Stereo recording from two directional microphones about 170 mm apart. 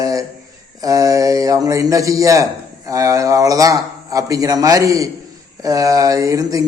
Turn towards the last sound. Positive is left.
turn(degrees=-20)  # may be behind; listen again after turning